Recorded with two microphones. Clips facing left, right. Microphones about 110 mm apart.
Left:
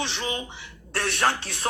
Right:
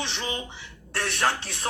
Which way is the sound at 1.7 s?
40° left (ahead or behind).